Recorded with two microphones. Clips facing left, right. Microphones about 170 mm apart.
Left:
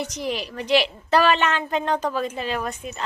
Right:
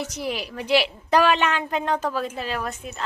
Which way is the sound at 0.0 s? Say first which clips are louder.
Left 1 dB; 5° right (ahead or behind).